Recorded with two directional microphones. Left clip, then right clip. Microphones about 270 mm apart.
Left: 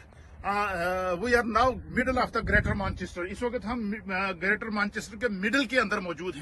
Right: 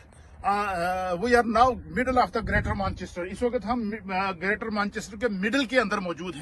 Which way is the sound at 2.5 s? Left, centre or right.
Right.